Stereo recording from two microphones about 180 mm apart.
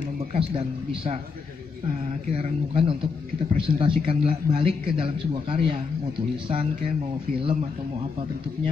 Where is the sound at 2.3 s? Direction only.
30° right (ahead or behind).